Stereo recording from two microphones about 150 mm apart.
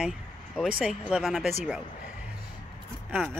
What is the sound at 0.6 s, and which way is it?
Speech, 5° right (ahead or behind).